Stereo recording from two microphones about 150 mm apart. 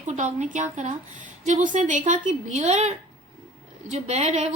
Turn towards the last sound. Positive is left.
turn(degrees=-50)  # may be behind; listen again after turning